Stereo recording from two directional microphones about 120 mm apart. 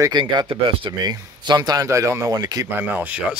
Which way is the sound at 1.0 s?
35° right (ahead or behind).